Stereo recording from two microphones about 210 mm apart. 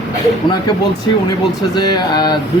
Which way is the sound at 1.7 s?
20° left (ahead or behind).